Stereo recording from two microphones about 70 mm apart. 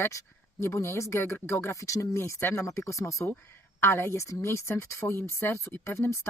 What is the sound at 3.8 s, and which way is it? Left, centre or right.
Speech, left.